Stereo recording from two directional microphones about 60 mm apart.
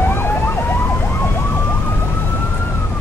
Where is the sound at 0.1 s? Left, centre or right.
Left.